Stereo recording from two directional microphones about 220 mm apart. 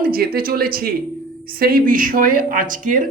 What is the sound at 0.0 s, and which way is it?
Speech, 45° right (ahead or behind).